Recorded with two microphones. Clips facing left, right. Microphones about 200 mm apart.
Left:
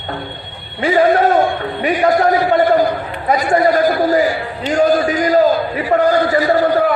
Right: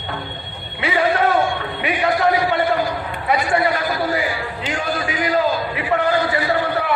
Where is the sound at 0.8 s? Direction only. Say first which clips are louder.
Left 6 dB; 40° left (ahead or behind).